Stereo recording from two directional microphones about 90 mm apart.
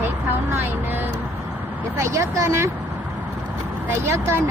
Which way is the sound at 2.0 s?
35° right (ahead or behind).